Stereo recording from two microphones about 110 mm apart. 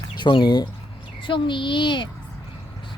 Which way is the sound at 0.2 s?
45° left (ahead or behind).